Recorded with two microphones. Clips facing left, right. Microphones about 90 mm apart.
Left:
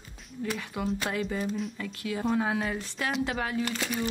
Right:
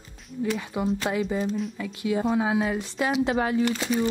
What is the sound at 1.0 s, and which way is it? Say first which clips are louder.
Speech: right 5 dB; 15° right (ahead or behind).